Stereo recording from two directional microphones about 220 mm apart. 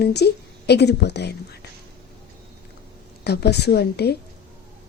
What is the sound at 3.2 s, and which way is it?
Speech, 50° left (ahead or behind).